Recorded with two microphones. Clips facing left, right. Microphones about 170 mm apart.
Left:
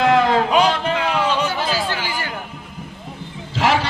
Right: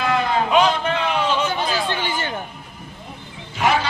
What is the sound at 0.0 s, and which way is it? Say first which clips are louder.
Music: left 5 dB; 90° left.